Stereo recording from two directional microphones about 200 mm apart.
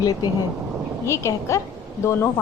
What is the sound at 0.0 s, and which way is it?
A woman's voice, 20° left (ahead or behind).